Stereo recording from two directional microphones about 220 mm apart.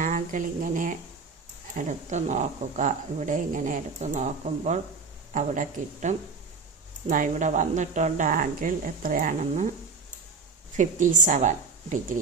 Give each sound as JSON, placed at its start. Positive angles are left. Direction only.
{"t": 0.0, "sound": "speech", "side_deg": -35}
{"t": 10.8, "sound": "speech", "side_deg": -35}